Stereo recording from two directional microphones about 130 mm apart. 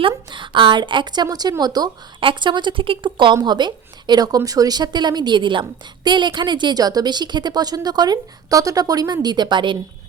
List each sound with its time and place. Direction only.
0.1 s a woman's voice: 35° right (ahead or behind)